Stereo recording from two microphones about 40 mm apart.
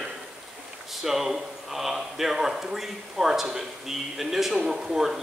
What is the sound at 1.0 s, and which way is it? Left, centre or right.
Speech, centre.